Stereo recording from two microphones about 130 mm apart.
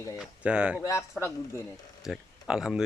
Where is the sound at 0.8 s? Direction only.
20° left (ahead or behind).